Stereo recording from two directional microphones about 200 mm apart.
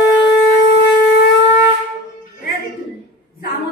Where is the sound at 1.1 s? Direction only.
60° left (ahead or behind).